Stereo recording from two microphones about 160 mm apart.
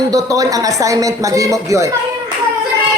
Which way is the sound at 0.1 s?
20° right (ahead or behind).